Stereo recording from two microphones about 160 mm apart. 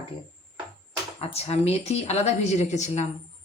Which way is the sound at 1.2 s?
40° left (ahead or behind).